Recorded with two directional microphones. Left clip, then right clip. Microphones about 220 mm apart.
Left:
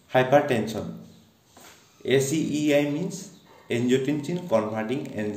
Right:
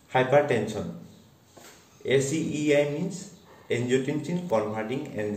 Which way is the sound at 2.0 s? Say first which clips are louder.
Left 2 dB; 45° left (ahead or behind).